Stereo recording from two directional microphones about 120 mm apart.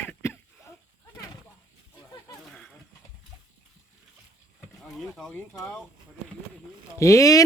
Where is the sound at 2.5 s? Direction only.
5° left (ahead or behind).